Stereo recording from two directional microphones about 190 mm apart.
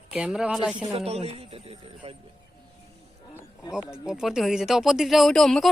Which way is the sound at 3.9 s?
5° right (ahead or behind).